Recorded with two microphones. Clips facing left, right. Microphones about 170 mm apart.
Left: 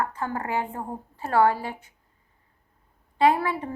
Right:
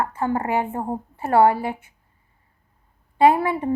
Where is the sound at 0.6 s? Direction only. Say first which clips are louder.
Right 6 dB; 50° right (ahead or behind).